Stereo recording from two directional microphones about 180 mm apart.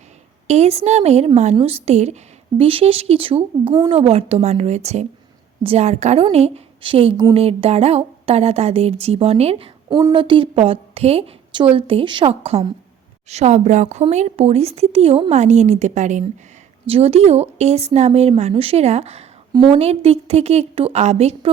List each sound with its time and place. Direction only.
0.4 s a woman's voice: 35° right (ahead or behind)
9.9 s a woman's voice: 20° right (ahead or behind)